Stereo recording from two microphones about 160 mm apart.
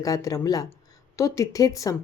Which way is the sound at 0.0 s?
20° left (ahead or behind).